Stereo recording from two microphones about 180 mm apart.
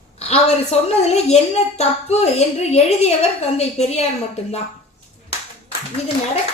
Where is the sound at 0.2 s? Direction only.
35° left (ahead or behind).